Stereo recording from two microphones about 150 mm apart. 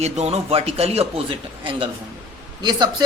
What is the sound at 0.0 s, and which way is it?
Speech, 45° right (ahead or behind).